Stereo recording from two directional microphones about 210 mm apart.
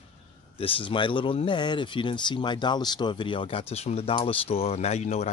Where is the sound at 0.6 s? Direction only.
25° left (ahead or behind).